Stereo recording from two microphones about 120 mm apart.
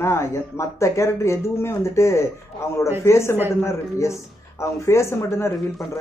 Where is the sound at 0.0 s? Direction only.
25° left (ahead or behind).